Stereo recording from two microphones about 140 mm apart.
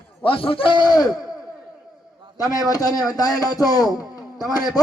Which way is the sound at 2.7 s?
25° left (ahead or behind).